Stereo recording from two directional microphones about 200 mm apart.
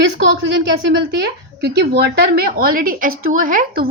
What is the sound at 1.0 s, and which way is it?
A woman's voice, 55° right (ahead or behind).